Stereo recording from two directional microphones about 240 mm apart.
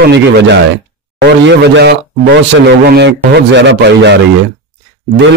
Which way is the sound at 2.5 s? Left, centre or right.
Right.